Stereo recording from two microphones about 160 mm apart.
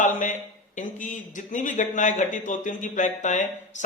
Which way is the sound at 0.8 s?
55° left (ahead or behind).